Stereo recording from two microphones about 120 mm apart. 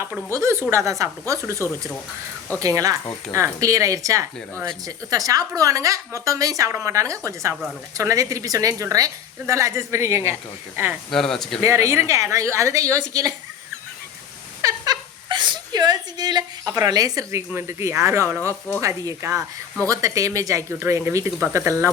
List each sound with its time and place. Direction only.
0.3 s a woman's voice: 25° right (ahead or behind)
1.6 s speech: 20° left (ahead or behind)
2.6 s a woman's voice: 30° right (ahead or behind)
11.1 s speech: 5° left (ahead or behind)
11.6 s a woman's voice: 25° right (ahead or behind)
14.6 s a sound: 30° right (ahead or behind)
15.3 s a sound: 40° right (ahead or behind)
16.8 s a woman's voice: 30° right (ahead or behind)